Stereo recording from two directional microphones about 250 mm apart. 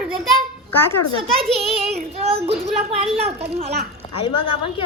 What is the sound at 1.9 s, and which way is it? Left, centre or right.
A child's voice, right.